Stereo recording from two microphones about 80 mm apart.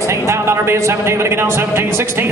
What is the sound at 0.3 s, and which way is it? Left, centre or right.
A man's voice, right.